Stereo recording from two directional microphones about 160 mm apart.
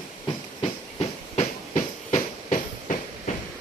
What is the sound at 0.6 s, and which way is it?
Train, 40° left (ahead or behind).